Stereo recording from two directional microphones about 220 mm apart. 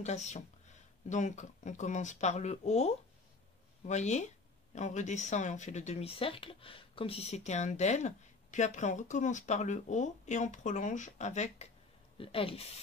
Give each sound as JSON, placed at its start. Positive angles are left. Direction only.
{"t": 0.0, "sound": "speech", "side_deg": 30}